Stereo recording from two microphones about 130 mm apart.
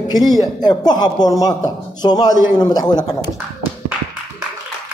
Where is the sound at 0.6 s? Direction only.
35° left (ahead or behind).